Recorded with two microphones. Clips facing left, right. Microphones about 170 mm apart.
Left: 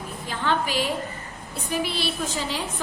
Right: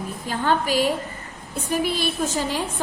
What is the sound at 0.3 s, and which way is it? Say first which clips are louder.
A woman's voice: right 4 dB; 45° right (ahead or behind).